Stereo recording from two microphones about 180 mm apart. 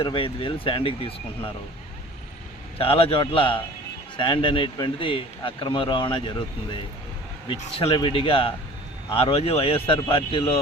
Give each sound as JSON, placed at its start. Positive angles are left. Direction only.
{"t": 0.0, "sound": "speech", "side_deg": 30}
{"t": 2.7, "sound": "a man's voice", "side_deg": 30}